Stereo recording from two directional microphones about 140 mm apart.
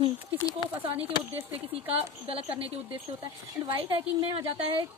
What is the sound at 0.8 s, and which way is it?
A woman's voice, 40° right (ahead or behind).